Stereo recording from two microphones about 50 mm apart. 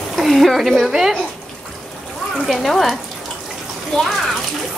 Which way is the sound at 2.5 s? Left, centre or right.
Centre.